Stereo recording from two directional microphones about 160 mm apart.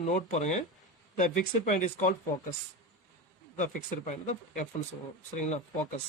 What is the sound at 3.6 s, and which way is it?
Speech, 50° left (ahead or behind).